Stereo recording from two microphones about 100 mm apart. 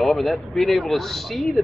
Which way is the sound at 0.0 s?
Centre (ahead or behind).